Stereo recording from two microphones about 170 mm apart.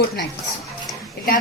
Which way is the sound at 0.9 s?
Centre (ahead or behind).